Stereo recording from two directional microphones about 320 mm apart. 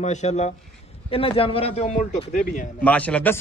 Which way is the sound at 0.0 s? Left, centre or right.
Left.